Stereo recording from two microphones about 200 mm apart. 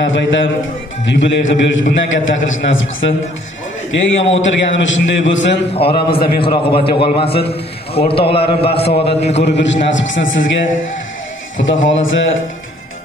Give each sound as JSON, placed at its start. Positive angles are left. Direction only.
{"t": 0.0, "sound": "a man's voice", "side_deg": 65}
{"t": 5.8, "sound": "a man's voice", "side_deg": 25}
{"t": 6.0, "sound": "a man's voice", "side_deg": 50}
{"t": 6.4, "sound": "a man's voice", "side_deg": 25}
{"t": 9.4, "sound": "a man's voice", "side_deg": 65}